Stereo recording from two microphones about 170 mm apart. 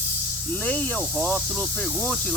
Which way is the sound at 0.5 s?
10° left (ahead or behind).